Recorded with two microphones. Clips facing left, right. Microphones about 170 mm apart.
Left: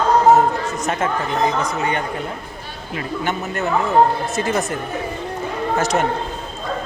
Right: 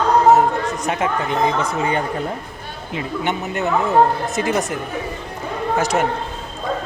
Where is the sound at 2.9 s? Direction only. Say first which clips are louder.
Right 1 dB; 20° right (ahead or behind).